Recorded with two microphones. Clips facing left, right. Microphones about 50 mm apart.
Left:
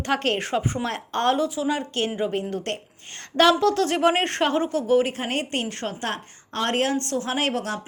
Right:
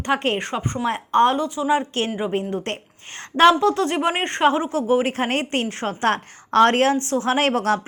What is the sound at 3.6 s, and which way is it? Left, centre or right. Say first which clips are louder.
Speech: even; centre.